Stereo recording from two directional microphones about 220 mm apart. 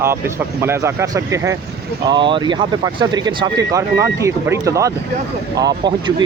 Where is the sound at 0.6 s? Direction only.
10° right (ahead or behind).